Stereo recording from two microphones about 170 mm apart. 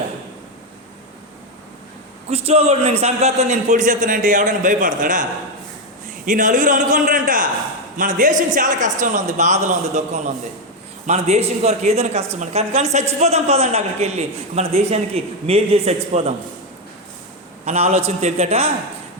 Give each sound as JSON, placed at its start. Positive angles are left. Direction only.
{"t": 2.3, "sound": "a man's voice", "side_deg": -35}
{"t": 6.2, "sound": "a man's voice", "side_deg": -50}
{"t": 17.7, "sound": "a man's voice", "side_deg": -40}